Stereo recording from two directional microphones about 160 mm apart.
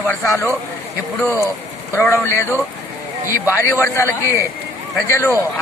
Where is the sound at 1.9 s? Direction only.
15° left (ahead or behind).